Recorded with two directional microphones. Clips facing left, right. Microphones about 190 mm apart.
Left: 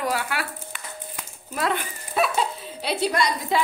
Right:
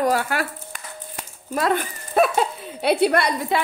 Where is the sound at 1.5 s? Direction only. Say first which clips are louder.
Right 4 dB; 45° right (ahead or behind).